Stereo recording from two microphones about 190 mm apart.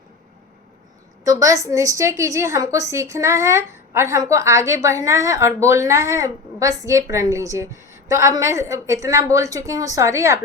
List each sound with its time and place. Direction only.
1.2 s a woman's voice: 15° right (ahead or behind)